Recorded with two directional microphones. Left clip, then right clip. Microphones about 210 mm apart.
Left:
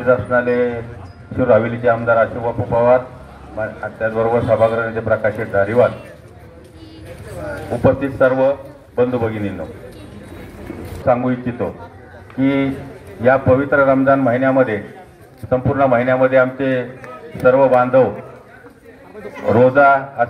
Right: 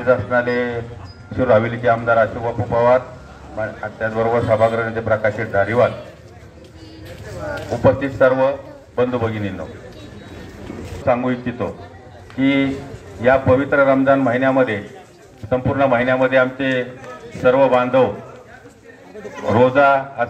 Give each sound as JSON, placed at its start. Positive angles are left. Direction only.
{"t": 0.0, "sound": "a man's voice", "side_deg": 45}
{"t": 7.8, "sound": "a man's voice", "side_deg": 40}
{"t": 11.1, "sound": "a man's voice", "side_deg": 45}
{"t": 19.4, "sound": "a man's voice", "side_deg": 50}